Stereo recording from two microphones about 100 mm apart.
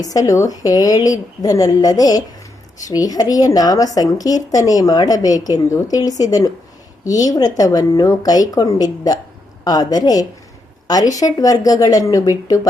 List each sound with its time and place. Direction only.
0.0 s speech: 35° left (ahead or behind)